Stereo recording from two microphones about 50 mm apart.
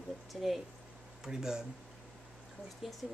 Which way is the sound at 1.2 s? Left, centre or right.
Centre.